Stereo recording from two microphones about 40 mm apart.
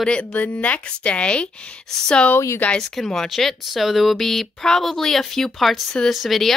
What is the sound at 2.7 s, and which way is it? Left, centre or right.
Speech, centre.